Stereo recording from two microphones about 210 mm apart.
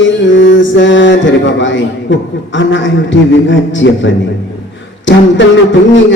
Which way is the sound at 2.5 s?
60° left (ahead or behind).